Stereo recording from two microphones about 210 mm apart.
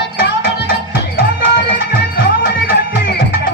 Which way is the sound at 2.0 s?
50° left (ahead or behind).